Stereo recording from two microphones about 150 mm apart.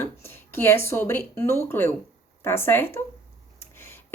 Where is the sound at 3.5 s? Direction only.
15° left (ahead or behind).